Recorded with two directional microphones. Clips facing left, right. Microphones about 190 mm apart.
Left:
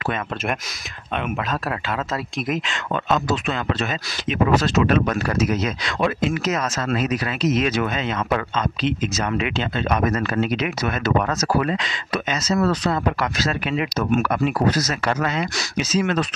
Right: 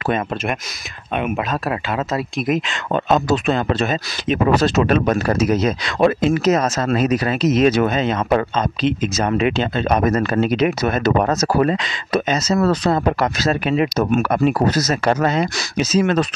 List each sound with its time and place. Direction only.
1.1 s speech: 15° right (ahead or behind)
2.9 s a man's voice: 40° right (ahead or behind)